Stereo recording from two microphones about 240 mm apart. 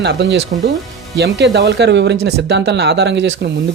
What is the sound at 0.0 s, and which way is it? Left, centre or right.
Speech, right.